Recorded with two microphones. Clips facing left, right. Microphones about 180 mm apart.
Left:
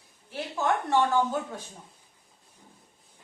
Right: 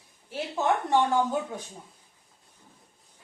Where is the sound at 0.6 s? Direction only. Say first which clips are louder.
Right 1 dB; 20° right (ahead or behind).